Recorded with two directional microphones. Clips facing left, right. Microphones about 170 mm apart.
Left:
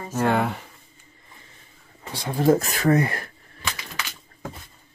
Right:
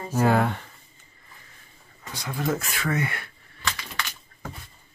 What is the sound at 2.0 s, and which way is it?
Speech, 30° left (ahead or behind).